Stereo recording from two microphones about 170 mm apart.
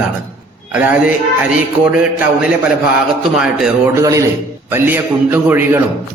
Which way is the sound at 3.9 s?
20° right (ahead or behind).